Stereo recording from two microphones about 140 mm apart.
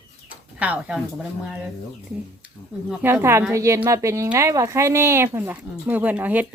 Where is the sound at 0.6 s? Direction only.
10° right (ahead or behind).